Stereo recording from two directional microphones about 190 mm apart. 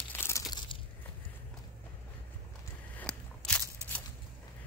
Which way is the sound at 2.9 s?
5° left (ahead or behind).